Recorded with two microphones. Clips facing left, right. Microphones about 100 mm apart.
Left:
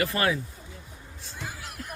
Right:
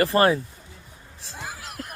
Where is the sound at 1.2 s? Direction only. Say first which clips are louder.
Right 3 dB; 85° right.